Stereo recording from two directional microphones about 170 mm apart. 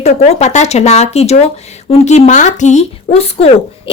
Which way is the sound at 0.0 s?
40° left (ahead or behind).